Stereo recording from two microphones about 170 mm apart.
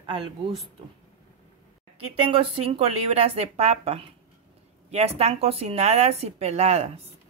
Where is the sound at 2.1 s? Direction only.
35° right (ahead or behind).